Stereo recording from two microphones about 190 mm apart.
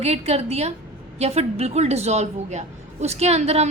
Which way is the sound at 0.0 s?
35° right (ahead or behind).